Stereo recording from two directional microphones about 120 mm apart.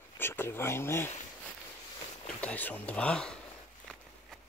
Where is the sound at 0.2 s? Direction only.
20° left (ahead or behind).